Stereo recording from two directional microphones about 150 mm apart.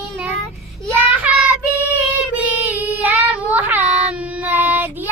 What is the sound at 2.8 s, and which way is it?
Child singing, 10° right (ahead or behind).